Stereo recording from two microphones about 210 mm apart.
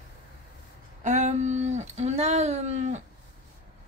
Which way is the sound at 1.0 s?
35° right (ahead or behind).